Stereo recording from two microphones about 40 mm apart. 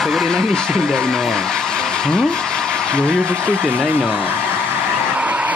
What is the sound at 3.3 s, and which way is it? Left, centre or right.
Speech, right.